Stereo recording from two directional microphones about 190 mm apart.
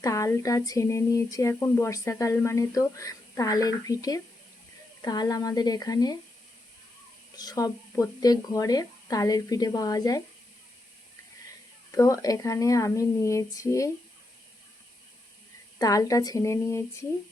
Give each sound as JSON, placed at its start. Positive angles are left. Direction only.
{"t": 0.0, "sound": "speech", "side_deg": 15}
{"t": 7.3, "sound": "speech", "side_deg": 20}
{"t": 11.9, "sound": "speech", "side_deg": 15}
{"t": 15.8, "sound": "speech", "side_deg": 20}